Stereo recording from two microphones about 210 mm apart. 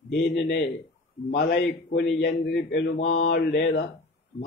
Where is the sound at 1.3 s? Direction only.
50° left (ahead or behind).